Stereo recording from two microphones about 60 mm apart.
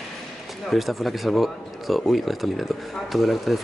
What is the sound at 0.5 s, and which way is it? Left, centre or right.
Speech, centre.